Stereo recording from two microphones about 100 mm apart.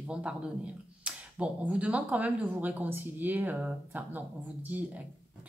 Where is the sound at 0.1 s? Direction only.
10° right (ahead or behind).